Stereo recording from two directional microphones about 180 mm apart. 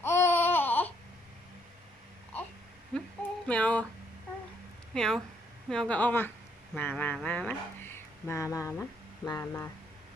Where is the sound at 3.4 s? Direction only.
5° left (ahead or behind).